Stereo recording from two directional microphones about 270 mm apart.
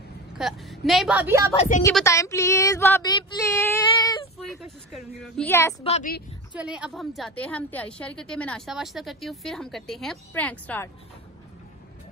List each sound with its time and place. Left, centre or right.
0.4 s a woman's voice: centre
1.8 s speech: centre
4.6 s a woman's voice: centre
5.8 s a woman's voice: left
6.5 s a woman's voice: centre